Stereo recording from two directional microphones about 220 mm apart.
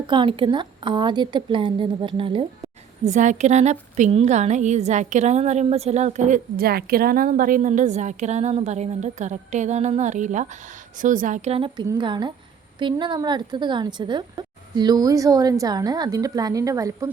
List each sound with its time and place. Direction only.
0.1 s a woman's voice: 20° right (ahead or behind)
3.0 s a woman's voice: 35° right (ahead or behind); by 17.1 s 15° right (ahead or behind)